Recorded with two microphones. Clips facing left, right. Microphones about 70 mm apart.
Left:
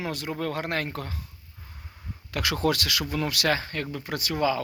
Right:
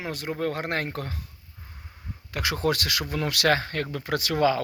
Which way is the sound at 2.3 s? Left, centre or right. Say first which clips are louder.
Even; right.